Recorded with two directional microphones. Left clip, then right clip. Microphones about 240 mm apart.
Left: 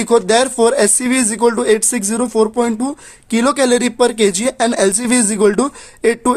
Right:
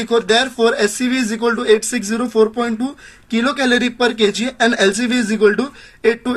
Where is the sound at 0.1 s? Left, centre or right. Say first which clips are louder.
Left 2 dB; left.